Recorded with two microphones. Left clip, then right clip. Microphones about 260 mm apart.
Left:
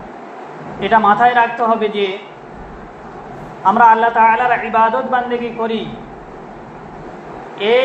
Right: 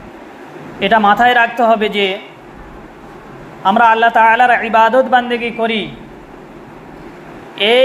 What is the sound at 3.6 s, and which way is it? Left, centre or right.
A man's voice, right.